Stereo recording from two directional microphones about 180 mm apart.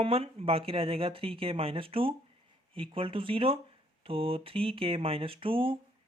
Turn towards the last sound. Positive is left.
turn(degrees=-30)  # may be behind; listen again after turning